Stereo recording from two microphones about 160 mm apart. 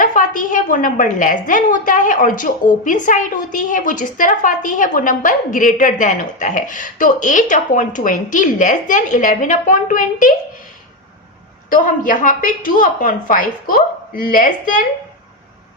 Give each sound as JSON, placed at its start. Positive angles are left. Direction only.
{"t": 0.0, "sound": "a woman's voice", "side_deg": 55}
{"t": 11.7, "sound": "a woman's voice", "side_deg": 55}